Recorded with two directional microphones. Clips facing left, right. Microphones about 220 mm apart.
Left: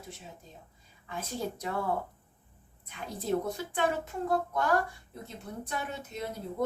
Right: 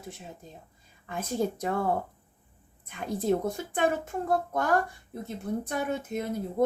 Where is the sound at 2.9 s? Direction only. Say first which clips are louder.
Right 5 dB; 55° right (ahead or behind).